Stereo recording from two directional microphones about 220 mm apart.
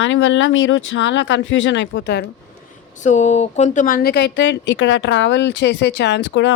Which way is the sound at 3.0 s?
35° left (ahead or behind).